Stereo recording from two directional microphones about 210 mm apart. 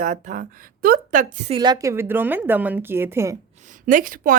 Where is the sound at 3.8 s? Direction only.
40° right (ahead or behind).